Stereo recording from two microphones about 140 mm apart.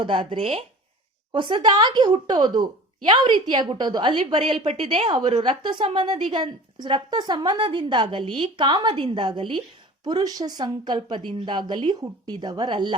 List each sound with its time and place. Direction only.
0.0 s a woman's voice: 35° right (ahead or behind)